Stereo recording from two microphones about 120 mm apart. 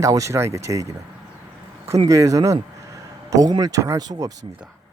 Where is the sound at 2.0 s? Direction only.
25° right (ahead or behind).